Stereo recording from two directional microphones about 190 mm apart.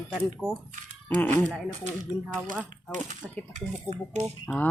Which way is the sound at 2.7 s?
40° right (ahead or behind).